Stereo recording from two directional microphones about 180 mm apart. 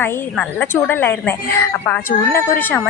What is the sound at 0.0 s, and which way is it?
Speech, 10° left (ahead or behind).